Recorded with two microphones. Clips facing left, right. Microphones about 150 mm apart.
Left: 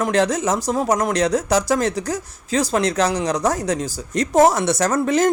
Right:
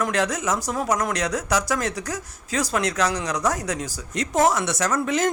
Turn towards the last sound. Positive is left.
turn(degrees=35)  # may be behind; listen again after turning